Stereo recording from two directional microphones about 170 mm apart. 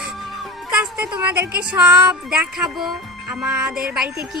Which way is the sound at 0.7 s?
10° right (ahead or behind).